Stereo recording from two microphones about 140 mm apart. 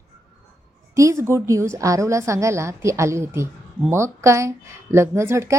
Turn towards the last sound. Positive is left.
turn(degrees=-20)  # may be behind; listen again after turning